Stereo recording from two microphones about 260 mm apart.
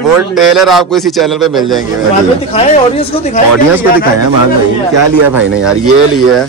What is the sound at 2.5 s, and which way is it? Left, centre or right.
Speech, left.